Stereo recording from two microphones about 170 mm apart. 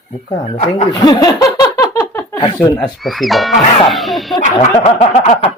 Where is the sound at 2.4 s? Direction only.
25° left (ahead or behind).